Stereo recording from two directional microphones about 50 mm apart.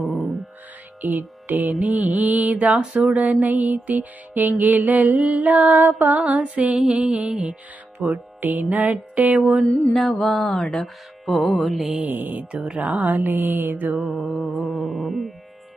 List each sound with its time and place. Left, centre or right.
1.5 s music: right
1.8 s mantra: right
3.2 s music: right
6.4 s mantra: right
8.0 s music: right
9.9 s speech: centre
11.3 s carnatic music: centre
12.0 s music: right
12.5 s music: right
14.1 s carnatic music: centre